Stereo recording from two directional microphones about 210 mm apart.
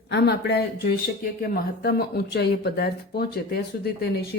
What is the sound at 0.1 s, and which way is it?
Speech, 55° left (ahead or behind).